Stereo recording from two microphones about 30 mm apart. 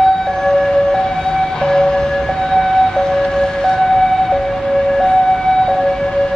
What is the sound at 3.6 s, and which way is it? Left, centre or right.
Ambulance, centre.